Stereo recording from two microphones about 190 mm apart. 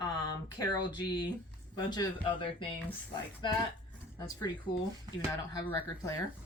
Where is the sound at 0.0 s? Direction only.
20° left (ahead or behind).